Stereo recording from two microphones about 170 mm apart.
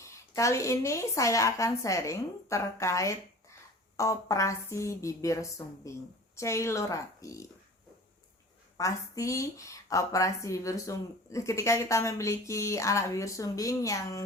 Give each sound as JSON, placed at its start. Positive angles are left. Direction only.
{"t": 0.0, "sound": "a woman's voice", "side_deg": 15}
{"t": 8.8, "sound": "a woman's voice", "side_deg": 20}